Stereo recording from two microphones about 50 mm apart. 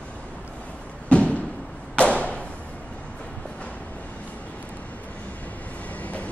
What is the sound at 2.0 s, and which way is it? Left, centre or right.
Thump, left.